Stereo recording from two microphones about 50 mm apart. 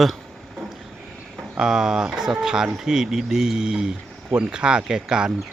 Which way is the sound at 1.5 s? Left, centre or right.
Centre.